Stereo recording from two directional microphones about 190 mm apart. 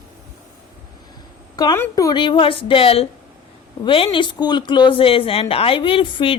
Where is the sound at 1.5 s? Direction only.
20° left (ahead or behind).